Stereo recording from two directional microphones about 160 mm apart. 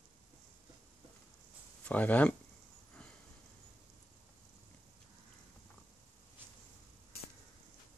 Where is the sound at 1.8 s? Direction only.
10° left (ahead or behind).